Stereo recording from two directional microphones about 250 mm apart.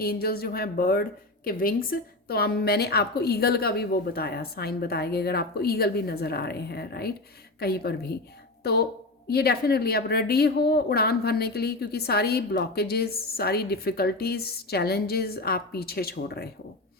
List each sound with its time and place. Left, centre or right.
0.0 s a woman's voice: left